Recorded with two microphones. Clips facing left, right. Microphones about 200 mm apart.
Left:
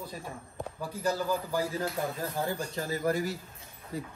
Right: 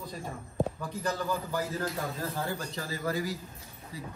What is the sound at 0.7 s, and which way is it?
Speech, 10° left (ahead or behind).